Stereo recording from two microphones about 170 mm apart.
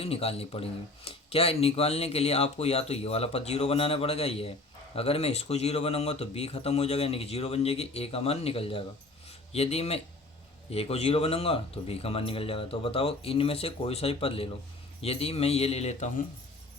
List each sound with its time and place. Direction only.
0.0 s speech: 35° left (ahead or behind)